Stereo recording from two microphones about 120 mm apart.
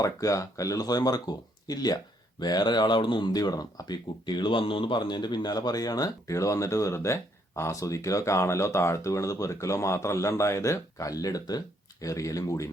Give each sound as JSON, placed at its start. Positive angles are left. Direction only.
{"t": 0.0, "sound": "speech", "side_deg": 25}